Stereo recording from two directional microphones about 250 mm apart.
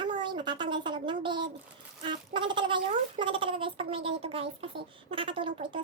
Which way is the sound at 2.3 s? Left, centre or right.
Centre.